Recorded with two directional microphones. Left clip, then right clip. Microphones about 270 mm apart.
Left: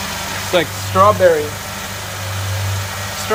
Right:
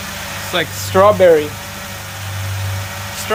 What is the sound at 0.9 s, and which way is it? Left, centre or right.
Speech, right.